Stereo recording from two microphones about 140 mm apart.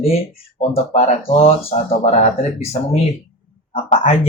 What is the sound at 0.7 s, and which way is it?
Speech, 50° left (ahead or behind).